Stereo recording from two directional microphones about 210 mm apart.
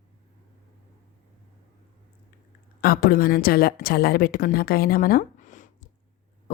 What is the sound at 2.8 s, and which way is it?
Speech, 45° left (ahead or behind).